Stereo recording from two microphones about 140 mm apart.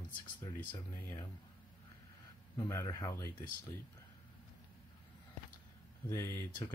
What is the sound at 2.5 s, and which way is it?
Speech, 20° left (ahead or behind).